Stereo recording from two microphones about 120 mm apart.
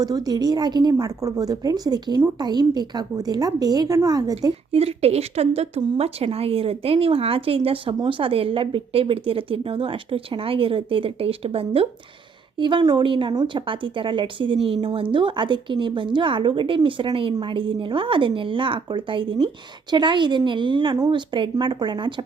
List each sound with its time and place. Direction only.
0.0 s a woman's voice: 35° right (ahead or behind)
4.7 s a woman's voice: 55° right (ahead or behind); by 22.1 s 40° right (ahead or behind)